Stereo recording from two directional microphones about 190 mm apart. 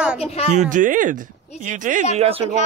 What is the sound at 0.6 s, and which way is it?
Speech, 45° right (ahead or behind).